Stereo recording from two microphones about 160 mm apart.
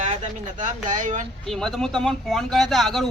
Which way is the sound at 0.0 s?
50° right (ahead or behind).